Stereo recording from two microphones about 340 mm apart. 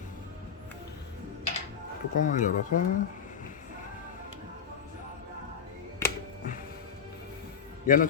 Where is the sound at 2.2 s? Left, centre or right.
Left.